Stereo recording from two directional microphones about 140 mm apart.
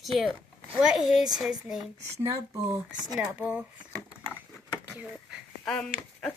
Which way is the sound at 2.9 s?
5° right (ahead or behind).